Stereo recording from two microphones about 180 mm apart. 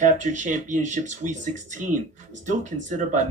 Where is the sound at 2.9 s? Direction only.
45° right (ahead or behind).